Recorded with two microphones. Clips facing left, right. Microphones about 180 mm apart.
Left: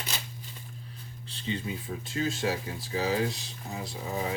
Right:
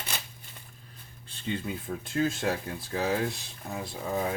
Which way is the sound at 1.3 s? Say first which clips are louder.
Right 1 dB; 55° right (ahead or behind).